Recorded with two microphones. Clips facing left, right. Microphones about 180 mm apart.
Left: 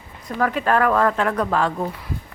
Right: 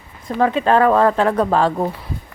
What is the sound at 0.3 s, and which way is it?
A woman's voice, 25° right (ahead or behind).